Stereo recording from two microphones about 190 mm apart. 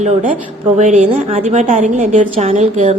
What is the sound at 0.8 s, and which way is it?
A woman's voice, 40° right (ahead or behind).